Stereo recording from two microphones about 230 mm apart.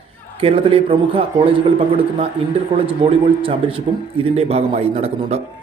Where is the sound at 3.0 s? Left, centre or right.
Right.